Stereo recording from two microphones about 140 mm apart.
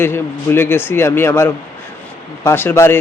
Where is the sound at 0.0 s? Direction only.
15° left (ahead or behind).